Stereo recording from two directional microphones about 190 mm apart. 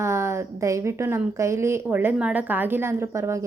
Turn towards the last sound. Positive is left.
turn(degrees=-15)  # may be behind; listen again after turning